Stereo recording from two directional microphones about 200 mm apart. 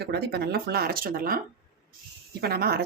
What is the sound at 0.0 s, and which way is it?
Speech, 55° right (ahead or behind).